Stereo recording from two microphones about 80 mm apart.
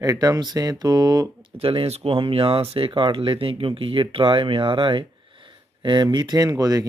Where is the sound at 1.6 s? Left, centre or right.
Right.